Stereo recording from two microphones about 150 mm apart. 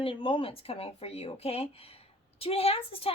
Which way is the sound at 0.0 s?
35° left (ahead or behind).